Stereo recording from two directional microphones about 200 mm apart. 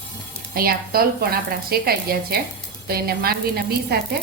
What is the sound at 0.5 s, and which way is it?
A woman's voice, 50° right (ahead or behind).